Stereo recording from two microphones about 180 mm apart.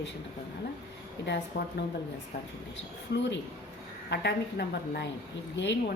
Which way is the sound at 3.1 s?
75° left (ahead or behind).